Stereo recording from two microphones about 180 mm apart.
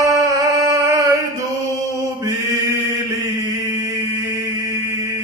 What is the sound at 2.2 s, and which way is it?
Mantra, 20° right (ahead or behind).